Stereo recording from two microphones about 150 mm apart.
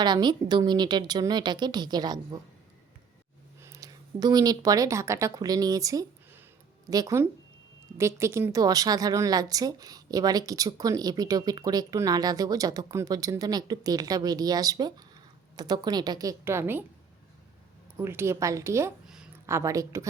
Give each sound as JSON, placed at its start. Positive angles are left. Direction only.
{"t": 0.0, "sound": "a woman's voice", "side_deg": -30}
{"t": 3.6, "sound": "a woman's voice", "side_deg": -20}
{"t": 17.9, "sound": "a woman's voice", "side_deg": -15}
{"t": 19.0, "sound": "a sound", "side_deg": -5}
{"t": 19.5, "sound": "a woman's voice", "side_deg": -20}